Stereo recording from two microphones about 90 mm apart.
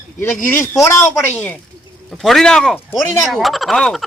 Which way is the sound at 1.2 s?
15° left (ahead or behind).